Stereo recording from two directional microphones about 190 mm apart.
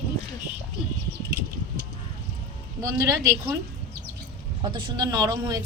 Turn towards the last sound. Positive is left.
turn(degrees=-20)  # may be behind; listen again after turning